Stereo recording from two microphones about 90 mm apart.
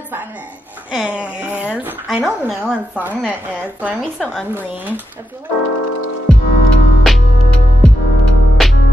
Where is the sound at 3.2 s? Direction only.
15° right (ahead or behind).